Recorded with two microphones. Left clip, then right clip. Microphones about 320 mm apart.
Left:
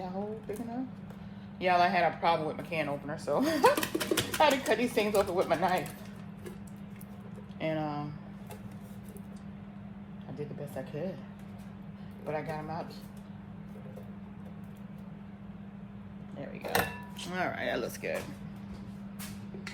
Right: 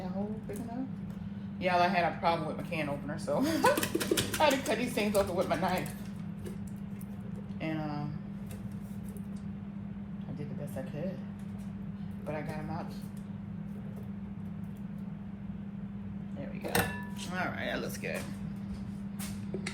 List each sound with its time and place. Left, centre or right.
1.6 s speech: left
3.8 s speech: centre
4.4 s speech: left
7.6 s a sound: left
12.3 s vehicle: left
17.3 s a sound: left